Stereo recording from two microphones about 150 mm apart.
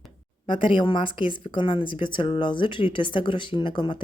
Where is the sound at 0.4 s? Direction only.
35° left (ahead or behind).